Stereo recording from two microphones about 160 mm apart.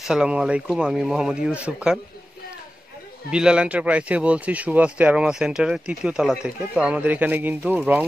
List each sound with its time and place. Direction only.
0.0 s speech: 5° right (ahead or behind)
3.3 s speech: 5° right (ahead or behind)